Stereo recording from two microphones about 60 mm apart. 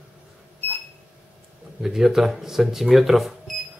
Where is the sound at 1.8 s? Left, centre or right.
Centre.